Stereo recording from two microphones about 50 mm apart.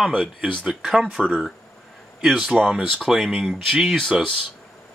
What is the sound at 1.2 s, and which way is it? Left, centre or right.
Speech, centre.